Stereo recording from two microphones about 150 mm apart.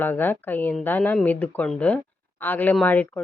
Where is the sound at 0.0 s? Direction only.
15° left (ahead or behind).